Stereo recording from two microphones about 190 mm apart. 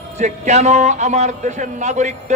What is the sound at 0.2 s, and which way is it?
A man's voice, 35° right (ahead or behind).